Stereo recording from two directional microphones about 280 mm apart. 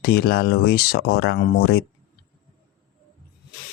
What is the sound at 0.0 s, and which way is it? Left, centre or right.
Mantra, left.